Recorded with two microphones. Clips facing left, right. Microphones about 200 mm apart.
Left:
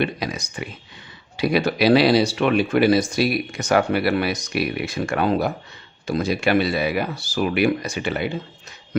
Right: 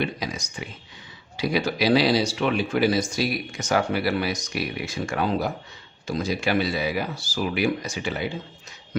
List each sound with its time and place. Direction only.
0.0 s speech: 65° left (ahead or behind)